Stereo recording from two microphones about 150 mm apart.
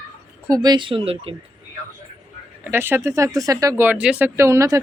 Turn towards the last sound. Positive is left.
turn(degrees=-20)  # may be behind; listen again after turning